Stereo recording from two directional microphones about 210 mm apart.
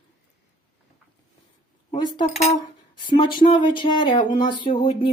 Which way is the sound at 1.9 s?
20° left (ahead or behind).